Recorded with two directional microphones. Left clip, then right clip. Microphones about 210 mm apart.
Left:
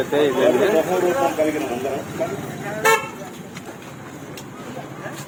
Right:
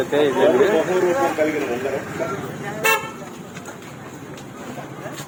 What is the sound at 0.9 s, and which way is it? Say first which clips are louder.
Speech: even; 40° left (ahead or behind).